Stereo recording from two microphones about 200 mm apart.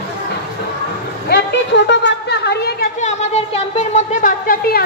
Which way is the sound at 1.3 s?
60° left (ahead or behind).